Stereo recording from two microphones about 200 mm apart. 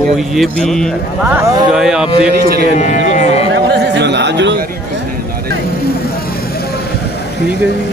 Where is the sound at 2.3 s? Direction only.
50° right (ahead or behind).